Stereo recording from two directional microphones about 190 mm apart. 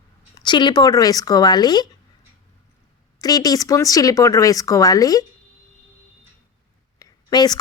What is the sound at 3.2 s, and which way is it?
Speech, 20° left (ahead or behind).